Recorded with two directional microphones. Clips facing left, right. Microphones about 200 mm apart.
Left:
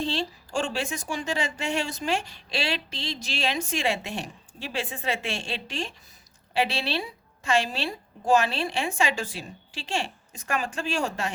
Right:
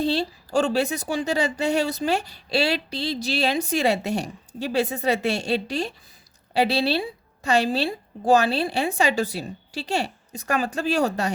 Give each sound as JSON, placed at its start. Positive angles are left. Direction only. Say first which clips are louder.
{"t": 0.0, "sound": "a woman's voice", "louder": "right 6 dB", "side_deg": -40}